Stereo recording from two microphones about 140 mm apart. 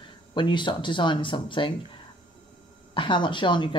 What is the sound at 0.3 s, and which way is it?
Speech, 35° left (ahead or behind).